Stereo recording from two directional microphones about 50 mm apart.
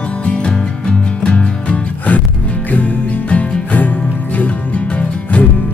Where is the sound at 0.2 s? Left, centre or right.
Left.